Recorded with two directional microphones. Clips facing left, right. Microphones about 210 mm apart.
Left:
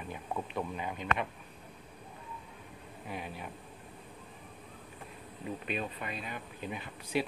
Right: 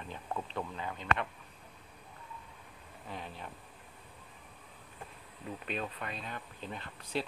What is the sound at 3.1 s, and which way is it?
Speech, 10° left (ahead or behind).